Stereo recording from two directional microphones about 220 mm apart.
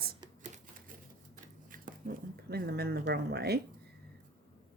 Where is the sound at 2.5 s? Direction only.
45° right (ahead or behind).